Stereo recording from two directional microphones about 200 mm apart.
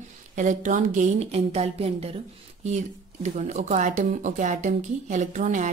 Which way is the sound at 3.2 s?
35° right (ahead or behind).